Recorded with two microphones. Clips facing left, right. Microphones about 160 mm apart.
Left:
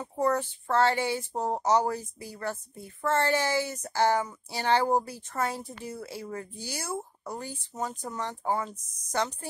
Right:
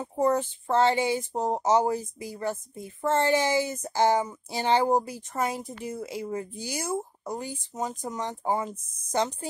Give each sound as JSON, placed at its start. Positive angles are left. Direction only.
{"t": 0.0, "sound": "speech", "side_deg": -20}